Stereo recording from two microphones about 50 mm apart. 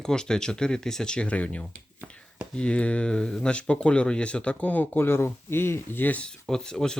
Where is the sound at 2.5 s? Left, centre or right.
Left.